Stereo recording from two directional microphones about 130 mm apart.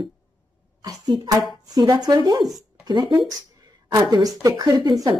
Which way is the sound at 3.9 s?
25° right (ahead or behind).